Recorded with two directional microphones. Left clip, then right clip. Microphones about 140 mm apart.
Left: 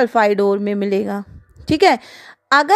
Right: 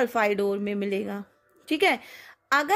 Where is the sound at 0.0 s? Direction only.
30° left (ahead or behind).